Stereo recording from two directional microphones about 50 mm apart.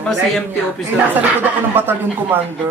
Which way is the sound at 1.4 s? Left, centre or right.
Right.